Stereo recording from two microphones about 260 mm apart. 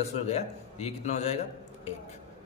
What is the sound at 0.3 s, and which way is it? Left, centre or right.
A man's voice, left.